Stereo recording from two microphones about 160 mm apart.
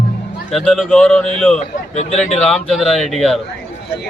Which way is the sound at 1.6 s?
45° left (ahead or behind).